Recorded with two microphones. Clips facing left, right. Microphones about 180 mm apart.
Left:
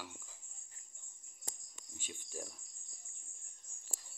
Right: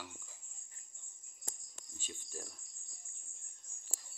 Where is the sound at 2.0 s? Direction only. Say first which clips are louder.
Left 2 dB; 15° left (ahead or behind).